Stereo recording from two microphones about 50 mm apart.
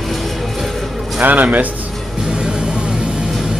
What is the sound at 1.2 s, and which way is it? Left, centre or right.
Speech, right.